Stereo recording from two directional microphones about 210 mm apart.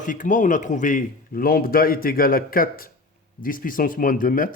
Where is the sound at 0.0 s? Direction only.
35° left (ahead or behind).